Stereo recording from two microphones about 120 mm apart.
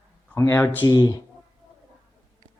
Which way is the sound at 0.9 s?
35° left (ahead or behind).